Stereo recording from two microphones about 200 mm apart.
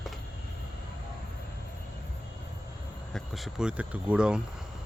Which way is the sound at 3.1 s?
Centre (ahead or behind).